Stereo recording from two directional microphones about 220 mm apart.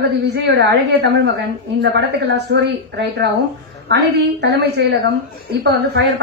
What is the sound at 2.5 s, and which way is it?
A woman's voice, 50° right (ahead or behind).